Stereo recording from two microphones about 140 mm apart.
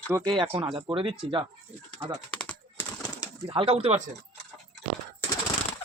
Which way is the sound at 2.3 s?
10° left (ahead or behind).